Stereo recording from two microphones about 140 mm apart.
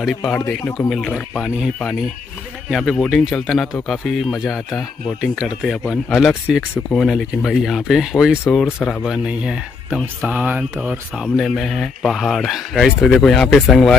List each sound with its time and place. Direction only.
0.0 s speech: 5° left (ahead or behind)
8.6 s speech: 15° left (ahead or behind)
9.0 s speech: 5° right (ahead or behind)